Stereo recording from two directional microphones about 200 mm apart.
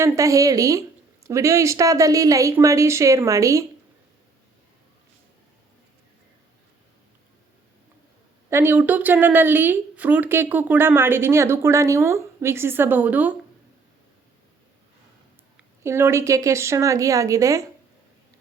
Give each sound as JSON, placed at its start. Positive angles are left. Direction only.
{"t": 0.0, "sound": "a woman's voice", "side_deg": -15}
{"t": 8.4, "sound": "a woman's voice", "side_deg": -10}
{"t": 15.5, "sound": "a woman's voice", "side_deg": -10}